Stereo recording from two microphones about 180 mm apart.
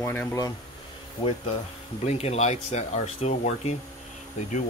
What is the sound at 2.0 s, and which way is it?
Speech, 35° left (ahead or behind).